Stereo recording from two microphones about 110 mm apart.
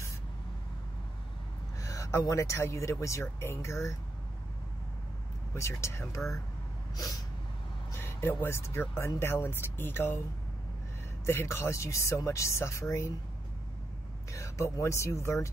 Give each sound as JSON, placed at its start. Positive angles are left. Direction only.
{"t": 1.8, "sound": "speech", "side_deg": 30}
{"t": 5.5, "sound": "speech", "side_deg": 25}
{"t": 7.9, "sound": "speech", "side_deg": 25}
{"t": 11.2, "sound": "speech", "side_deg": 25}
{"t": 14.3, "sound": "speech", "side_deg": 25}